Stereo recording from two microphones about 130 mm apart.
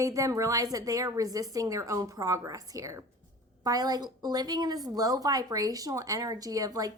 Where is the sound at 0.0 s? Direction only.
25° right (ahead or behind).